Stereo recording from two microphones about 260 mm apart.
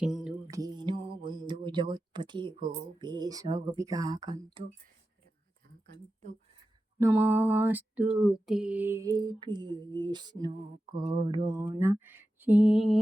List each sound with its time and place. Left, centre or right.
0.0 s music: centre
0.4 s a sound: centre
2.6 s lullaby: centre
4.6 s mantra: centre
7.0 s lullaby: centre
11.0 s mantra: centre
11.8 s lullaby: centre